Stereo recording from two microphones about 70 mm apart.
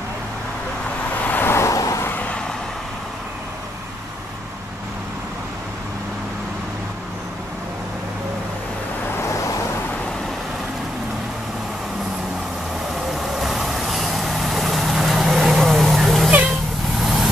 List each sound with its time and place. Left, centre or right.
1.2 s vehicle: left
1.5 s vehicle: left
13.2 s vehicle: centre